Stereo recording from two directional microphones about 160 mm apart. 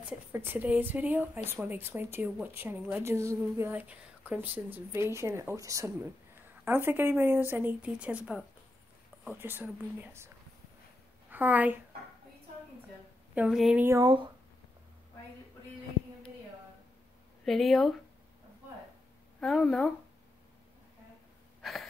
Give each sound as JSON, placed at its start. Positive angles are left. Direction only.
{"t": 0.3, "sound": "a woman's voice", "side_deg": -15}
{"t": 13.3, "sound": "speech", "side_deg": -5}
{"t": 13.8, "sound": "speech", "side_deg": -20}
{"t": 17.5, "sound": "speech", "side_deg": 0}
{"t": 19.4, "sound": "speech", "side_deg": 0}
{"t": 21.5, "sound": "gasp", "side_deg": 0}